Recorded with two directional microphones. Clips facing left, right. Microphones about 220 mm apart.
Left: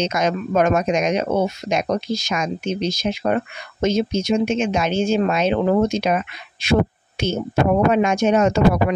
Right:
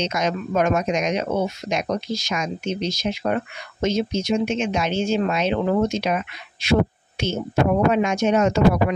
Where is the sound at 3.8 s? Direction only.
50° left (ahead or behind).